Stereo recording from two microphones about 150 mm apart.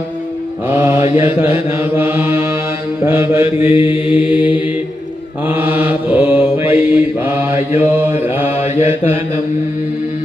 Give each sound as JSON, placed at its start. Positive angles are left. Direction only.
{"t": 0.7, "sound": "mantra", "side_deg": -15}
{"t": 4.0, "sound": "mantra", "side_deg": 35}
{"t": 4.3, "sound": "mantra", "side_deg": -10}